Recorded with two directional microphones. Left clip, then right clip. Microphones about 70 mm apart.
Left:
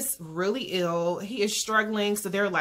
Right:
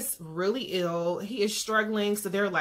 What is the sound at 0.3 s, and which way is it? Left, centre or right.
Speech, left.